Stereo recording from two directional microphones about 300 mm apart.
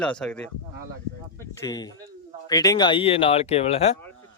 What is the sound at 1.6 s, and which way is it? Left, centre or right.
A man's voice, centre.